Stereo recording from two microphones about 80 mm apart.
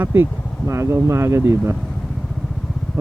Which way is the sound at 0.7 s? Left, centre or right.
Right.